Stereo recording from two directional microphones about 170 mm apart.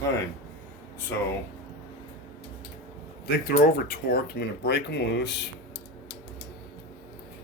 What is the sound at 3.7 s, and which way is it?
Speech, 60° left (ahead or behind).